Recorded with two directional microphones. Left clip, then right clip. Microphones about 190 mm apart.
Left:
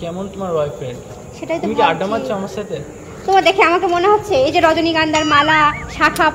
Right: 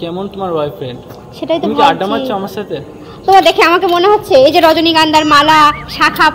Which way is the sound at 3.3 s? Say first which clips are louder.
Right 5 dB; 50° right (ahead or behind).